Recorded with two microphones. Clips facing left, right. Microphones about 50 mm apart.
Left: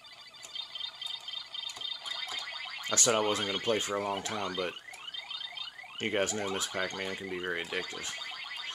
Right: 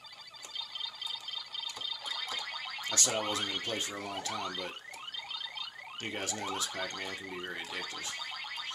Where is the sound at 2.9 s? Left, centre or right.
Left.